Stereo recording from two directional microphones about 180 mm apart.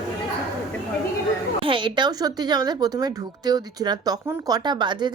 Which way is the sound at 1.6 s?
30° right (ahead or behind).